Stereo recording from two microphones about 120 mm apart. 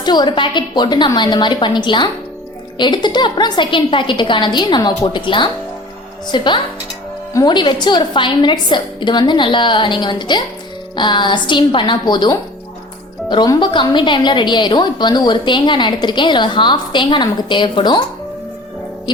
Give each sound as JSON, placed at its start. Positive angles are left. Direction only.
{"t": 0.0, "sound": "a woman's voice", "side_deg": 35}